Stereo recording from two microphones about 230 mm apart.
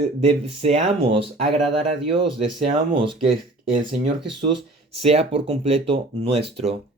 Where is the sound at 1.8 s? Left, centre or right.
Right.